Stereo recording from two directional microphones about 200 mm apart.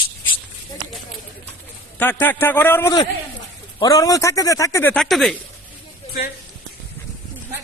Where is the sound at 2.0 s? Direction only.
10° left (ahead or behind).